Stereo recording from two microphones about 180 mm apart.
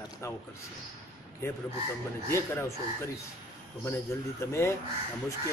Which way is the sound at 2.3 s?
15° left (ahead or behind).